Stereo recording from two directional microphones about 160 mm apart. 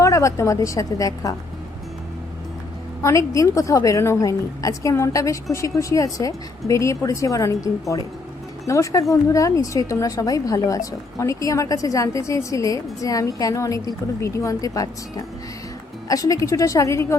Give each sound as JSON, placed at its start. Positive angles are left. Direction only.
{"t": 0.0, "sound": "a woman's voice", "side_deg": 20}
{"t": 3.0, "sound": "a woman's voice", "side_deg": 20}
{"t": 16.0, "sound": "a woman's voice", "side_deg": 20}